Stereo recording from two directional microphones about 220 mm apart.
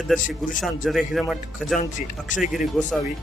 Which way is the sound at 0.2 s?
35° left (ahead or behind).